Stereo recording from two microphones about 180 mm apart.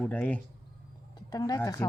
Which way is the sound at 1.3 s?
20° left (ahead or behind).